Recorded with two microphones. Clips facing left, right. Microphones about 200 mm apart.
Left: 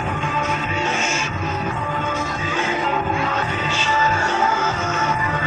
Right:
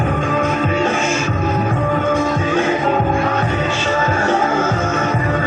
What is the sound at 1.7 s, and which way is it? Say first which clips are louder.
Music: right 8 dB; 55° right (ahead or behind).